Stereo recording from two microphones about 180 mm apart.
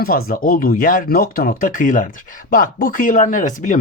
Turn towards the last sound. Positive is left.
turn(degrees=45)  # may be behind; listen again after turning